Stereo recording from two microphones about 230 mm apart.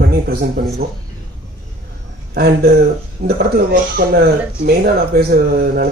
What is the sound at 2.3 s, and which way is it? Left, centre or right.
Speech, right.